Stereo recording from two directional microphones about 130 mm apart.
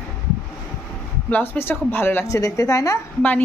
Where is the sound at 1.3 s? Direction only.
15° left (ahead or behind).